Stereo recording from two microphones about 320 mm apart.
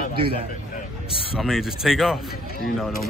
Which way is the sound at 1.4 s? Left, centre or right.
Centre.